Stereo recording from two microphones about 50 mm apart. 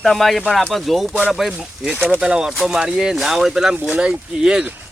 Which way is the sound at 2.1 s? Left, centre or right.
Centre.